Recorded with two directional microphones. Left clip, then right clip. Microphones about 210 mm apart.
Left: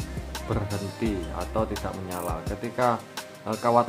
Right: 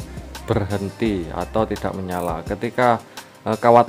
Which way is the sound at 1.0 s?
45° right (ahead or behind).